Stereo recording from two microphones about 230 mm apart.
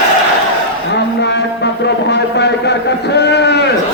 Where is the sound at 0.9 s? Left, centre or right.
Left.